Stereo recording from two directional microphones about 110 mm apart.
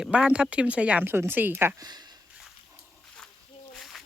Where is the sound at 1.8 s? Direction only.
40° right (ahead or behind).